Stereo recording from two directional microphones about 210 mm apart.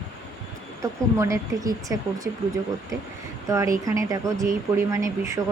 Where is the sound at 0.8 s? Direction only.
15° right (ahead or behind).